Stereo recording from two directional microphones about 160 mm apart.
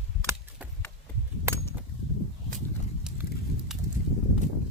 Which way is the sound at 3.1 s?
5° right (ahead or behind).